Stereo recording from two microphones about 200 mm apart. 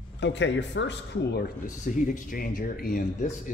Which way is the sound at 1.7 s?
40° left (ahead or behind).